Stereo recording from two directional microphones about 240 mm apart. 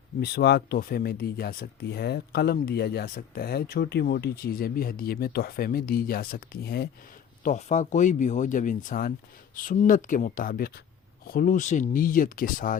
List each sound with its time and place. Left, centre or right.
0.2 s speech: left